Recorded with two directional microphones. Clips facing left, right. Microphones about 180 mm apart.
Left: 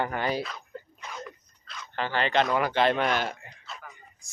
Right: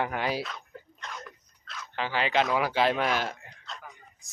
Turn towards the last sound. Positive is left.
turn(degrees=0)  # may be behind; listen again after turning